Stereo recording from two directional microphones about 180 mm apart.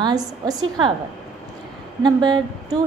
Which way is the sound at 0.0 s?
20° right (ahead or behind).